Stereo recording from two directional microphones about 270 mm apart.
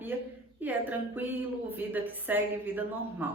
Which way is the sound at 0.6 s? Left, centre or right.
Centre.